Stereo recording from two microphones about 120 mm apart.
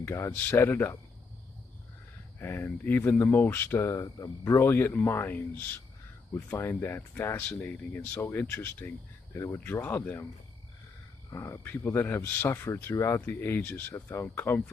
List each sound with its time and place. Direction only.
0.0 s speech: 20° left (ahead or behind)
2.3 s speech: 20° left (ahead or behind)
11.2 s speech: 25° left (ahead or behind)